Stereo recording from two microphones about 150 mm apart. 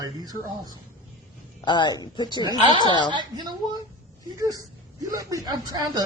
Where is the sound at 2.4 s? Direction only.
30° right (ahead or behind).